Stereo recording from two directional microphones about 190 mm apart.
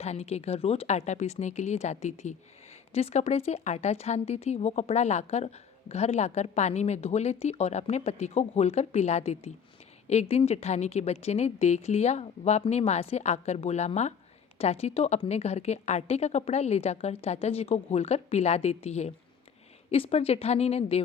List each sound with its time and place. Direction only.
0.0 s speech: 35° left (ahead or behind)